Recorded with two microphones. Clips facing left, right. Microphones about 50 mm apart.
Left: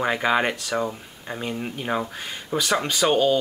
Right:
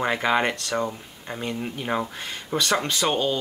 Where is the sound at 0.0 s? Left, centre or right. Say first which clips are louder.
Left 1 dB; centre.